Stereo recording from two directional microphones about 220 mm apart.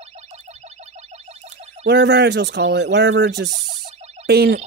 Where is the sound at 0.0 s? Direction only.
30° right (ahead or behind).